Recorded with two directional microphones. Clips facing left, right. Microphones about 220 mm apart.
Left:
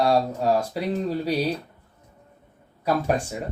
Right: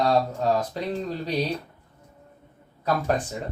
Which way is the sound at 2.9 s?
10° left (ahead or behind).